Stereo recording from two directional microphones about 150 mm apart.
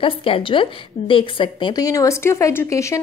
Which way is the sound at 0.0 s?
35° left (ahead or behind).